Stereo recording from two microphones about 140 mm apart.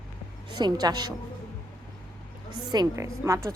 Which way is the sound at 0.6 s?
30° right (ahead or behind).